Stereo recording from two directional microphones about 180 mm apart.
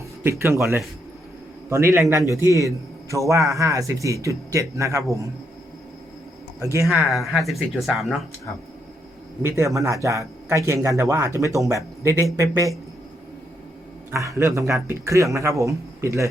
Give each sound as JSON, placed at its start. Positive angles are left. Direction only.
{"t": 0.2, "sound": "a man's voice", "side_deg": -15}
{"t": 6.6, "sound": "a man's voice", "side_deg": -15}
{"t": 6.8, "sound": "speech", "side_deg": 0}
{"t": 9.4, "sound": "a man's voice", "side_deg": -15}
{"t": 14.1, "sound": "a man's voice", "side_deg": -15}